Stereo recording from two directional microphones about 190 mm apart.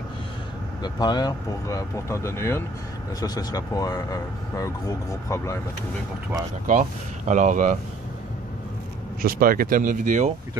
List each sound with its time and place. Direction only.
0.8 s speech: 20° left (ahead or behind)
6.7 s speech: 40° right (ahead or behind)
9.2 s speech: 50° right (ahead or behind)